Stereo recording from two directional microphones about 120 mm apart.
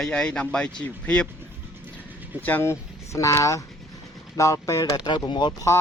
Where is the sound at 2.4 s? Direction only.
15° left (ahead or behind); by 5.5 s 40° left (ahead or behind).